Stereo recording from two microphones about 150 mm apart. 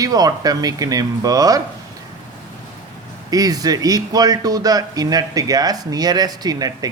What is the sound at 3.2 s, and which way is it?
Speech, 25° right (ahead or behind).